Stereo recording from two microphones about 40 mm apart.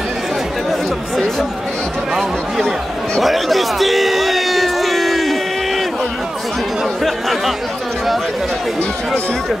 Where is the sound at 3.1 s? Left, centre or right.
Centre.